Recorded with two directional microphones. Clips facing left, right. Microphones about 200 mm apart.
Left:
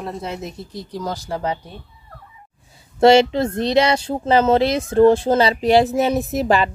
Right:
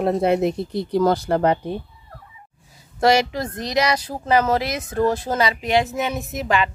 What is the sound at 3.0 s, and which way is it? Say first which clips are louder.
Speech: left 6 dB; 25° left (ahead or behind).